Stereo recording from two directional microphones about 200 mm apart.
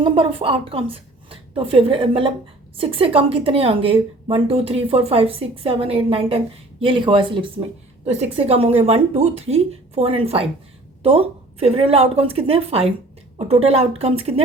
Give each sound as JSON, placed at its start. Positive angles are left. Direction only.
{"t": 0.0, "sound": "a woman's voice", "side_deg": -25}